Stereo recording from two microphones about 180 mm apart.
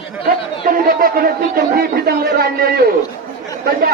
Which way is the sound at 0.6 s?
50° right (ahead or behind).